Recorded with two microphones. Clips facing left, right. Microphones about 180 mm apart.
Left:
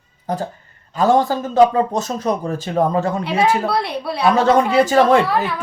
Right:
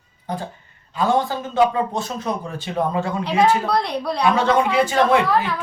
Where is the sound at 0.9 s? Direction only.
40° left (ahead or behind).